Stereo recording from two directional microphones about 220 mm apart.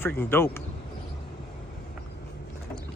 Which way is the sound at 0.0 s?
10° left (ahead or behind).